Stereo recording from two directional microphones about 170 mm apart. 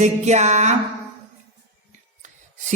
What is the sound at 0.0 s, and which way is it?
Music, 40° right (ahead or behind).